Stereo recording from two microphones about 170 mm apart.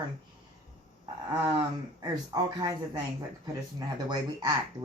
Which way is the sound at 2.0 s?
25° right (ahead or behind).